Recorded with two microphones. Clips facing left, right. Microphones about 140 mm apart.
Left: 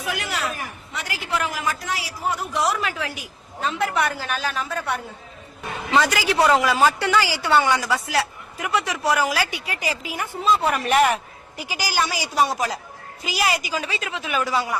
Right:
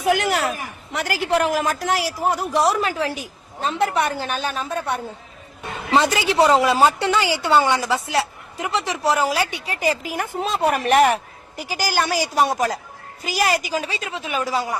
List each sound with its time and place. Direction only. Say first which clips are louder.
0.0 s a sound: right 8 dB; 50° right (ahead or behind)
0.9 s speech: right 7 dB; 55° right (ahead or behind); by 4.9 s 25° right (ahead or behind)
6.0 s speech: right 2 dB; 25° right (ahead or behind)
9.8 s a woman's voice: right 7 dB; 45° right (ahead or behind)